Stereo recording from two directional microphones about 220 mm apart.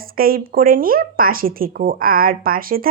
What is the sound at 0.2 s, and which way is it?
Speech, 40° right (ahead or behind).